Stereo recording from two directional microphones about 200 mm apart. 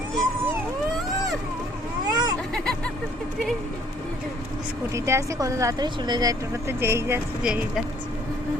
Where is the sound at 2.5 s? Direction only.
5° left (ahead or behind).